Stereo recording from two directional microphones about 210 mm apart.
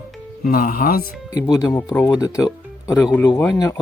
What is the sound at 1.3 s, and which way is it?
Speech, 15° left (ahead or behind).